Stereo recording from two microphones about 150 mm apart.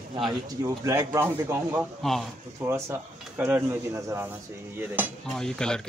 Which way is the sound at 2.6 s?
20° right (ahead or behind).